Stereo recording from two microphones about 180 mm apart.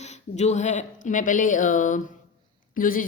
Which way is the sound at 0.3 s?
40° left (ahead or behind).